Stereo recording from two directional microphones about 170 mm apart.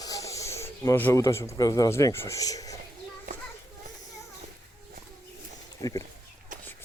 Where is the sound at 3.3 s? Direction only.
50° right (ahead or behind).